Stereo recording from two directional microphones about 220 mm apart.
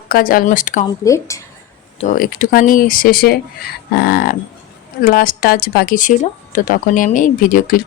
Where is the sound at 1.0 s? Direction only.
15° left (ahead or behind).